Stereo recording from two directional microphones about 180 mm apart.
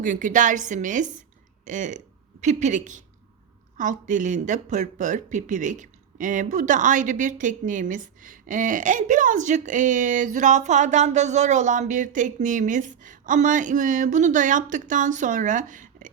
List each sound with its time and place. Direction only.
0.0 s a woman's voice: 45° right (ahead or behind)